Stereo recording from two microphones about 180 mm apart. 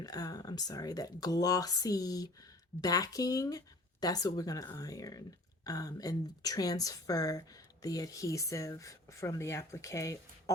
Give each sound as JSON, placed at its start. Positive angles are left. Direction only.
{"t": 0.0, "sound": "speech", "side_deg": 20}